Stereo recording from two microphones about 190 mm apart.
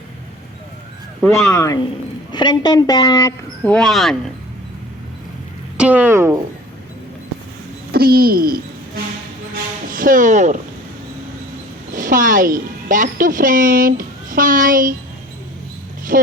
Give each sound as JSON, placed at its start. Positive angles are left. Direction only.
{"t": 1.2, "sound": "a woman's voice", "side_deg": 10}
{"t": 3.6, "sound": "speech", "side_deg": 5}
{"t": 5.7, "sound": "speech", "side_deg": -5}
{"t": 7.9, "sound": "speech", "side_deg": -50}
{"t": 9.9, "sound": "speech", "side_deg": -45}
{"t": 11.9, "sound": "a woman's voice", "side_deg": -45}
{"t": 16.1, "sound": "speech", "side_deg": -50}